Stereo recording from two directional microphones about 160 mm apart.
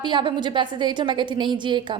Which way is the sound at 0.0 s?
30° right (ahead or behind).